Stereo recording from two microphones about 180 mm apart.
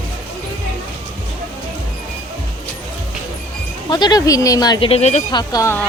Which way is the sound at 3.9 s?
25° left (ahead or behind).